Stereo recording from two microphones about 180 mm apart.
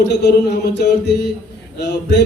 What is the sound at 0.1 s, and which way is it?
A man's voice, 70° left (ahead or behind).